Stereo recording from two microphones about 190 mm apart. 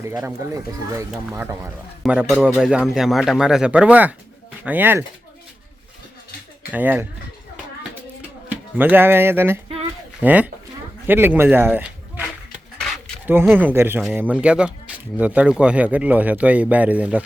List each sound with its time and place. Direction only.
0.0 s speech: 15° right (ahead or behind)
6.7 s speech: 10° right (ahead or behind)
8.4 s speech: 10° right (ahead or behind)
13.4 s speech: 10° right (ahead or behind)